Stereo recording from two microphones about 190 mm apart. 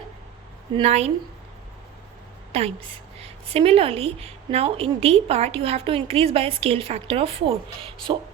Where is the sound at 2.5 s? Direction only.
30° right (ahead or behind).